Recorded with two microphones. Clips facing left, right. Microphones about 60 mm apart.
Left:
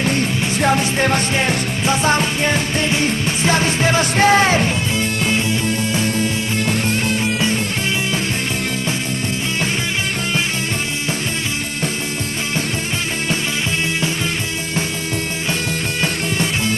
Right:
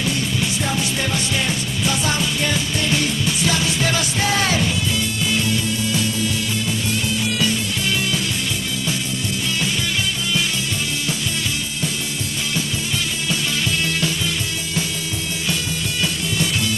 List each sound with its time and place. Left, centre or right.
0.0 s music: left
7.2 s music: left
16.0 s music: left